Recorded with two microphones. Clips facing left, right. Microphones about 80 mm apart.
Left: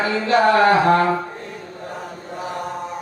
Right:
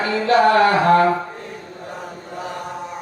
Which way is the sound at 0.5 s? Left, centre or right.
Right.